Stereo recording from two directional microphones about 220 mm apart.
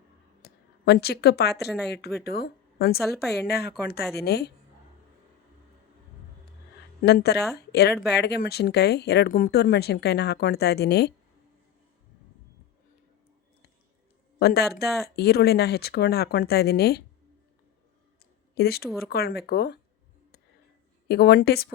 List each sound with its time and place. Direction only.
0.4 s a woman's voice: 45° left (ahead or behind)
7.0 s speech: 45° left (ahead or behind)
14.3 s speech: 45° left (ahead or behind)
18.5 s speech: 45° left (ahead or behind)
21.1 s speech: 45° left (ahead or behind)